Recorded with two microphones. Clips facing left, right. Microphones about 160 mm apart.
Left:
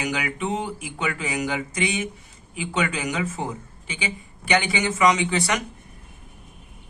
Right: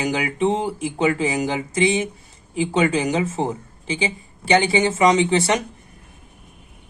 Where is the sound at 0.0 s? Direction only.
30° right (ahead or behind).